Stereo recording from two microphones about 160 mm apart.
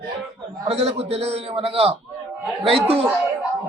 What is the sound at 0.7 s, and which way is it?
A man's voice, 40° right (ahead or behind).